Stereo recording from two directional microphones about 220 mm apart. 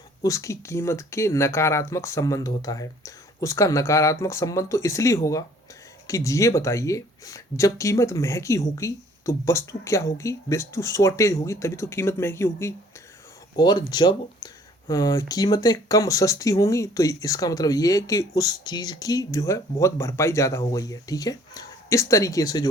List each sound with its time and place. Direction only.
0.2 s speech: 15° left (ahead or behind)